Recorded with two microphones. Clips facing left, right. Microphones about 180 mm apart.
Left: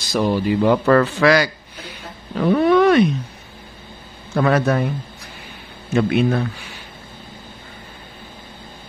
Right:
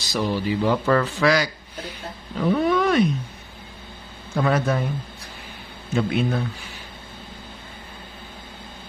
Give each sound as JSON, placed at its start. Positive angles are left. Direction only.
{"t": 0.1, "sound": "speech", "side_deg": 55}
{"t": 4.4, "sound": "a man's voice", "side_deg": 70}
{"t": 5.9, "sound": "a man's voice", "side_deg": 70}